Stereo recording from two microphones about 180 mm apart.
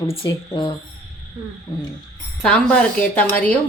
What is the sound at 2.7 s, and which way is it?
Speech, 10° left (ahead or behind).